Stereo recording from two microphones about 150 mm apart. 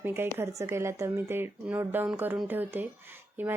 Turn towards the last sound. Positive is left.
turn(degrees=-15)  # may be behind; listen again after turning